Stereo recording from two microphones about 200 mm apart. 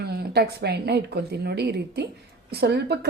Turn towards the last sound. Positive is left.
turn(degrees=-55)  # may be behind; listen again after turning